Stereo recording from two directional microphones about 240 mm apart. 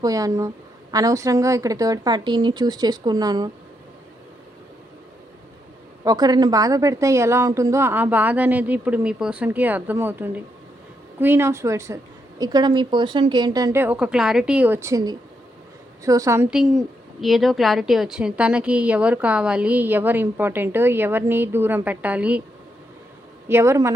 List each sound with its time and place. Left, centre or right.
0.0 s a woman's voice: centre
6.1 s a woman's voice: centre
23.5 s a woman's voice: centre